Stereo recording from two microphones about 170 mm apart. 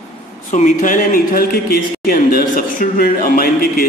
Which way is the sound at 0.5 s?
50° left (ahead or behind).